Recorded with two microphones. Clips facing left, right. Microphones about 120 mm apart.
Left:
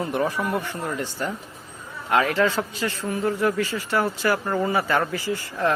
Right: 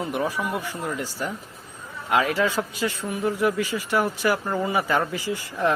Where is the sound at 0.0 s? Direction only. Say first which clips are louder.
Left 2 dB; 5° right (ahead or behind).